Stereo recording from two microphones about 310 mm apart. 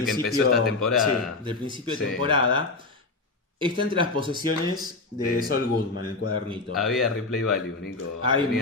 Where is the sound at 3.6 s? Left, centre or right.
Centre.